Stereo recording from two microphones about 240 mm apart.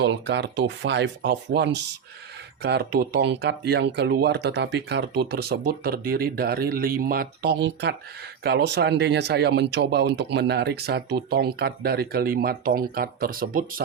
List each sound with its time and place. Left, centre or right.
0.0 s speech: right